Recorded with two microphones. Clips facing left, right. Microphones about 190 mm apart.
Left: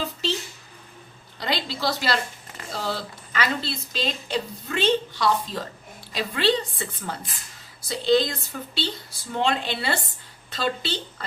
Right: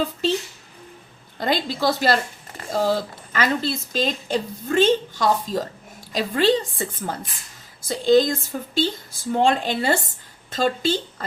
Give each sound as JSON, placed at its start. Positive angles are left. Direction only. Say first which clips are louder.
{"t": 1.4, "sound": "a woman's voice", "louder": "right 5 dB", "side_deg": -50}